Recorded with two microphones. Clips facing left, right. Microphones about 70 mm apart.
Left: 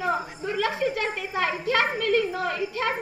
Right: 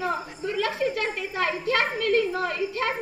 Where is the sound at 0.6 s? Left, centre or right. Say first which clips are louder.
Left 1 dB; left.